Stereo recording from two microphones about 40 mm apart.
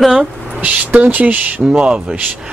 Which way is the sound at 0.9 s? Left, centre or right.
Right.